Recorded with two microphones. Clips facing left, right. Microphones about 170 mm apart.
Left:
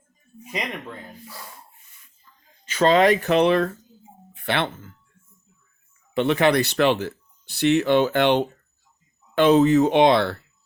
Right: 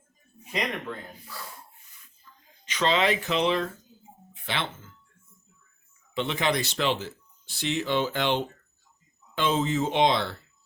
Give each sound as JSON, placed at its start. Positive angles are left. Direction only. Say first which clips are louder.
{"t": 2.6, "sound": "speech", "louder": "left 8 dB", "side_deg": 45}
{"t": 4.4, "sound": "doorbell", "louder": "left 8 dB", "side_deg": 60}
{"t": 6.1, "sound": "speech", "louder": "left 8 dB", "side_deg": 60}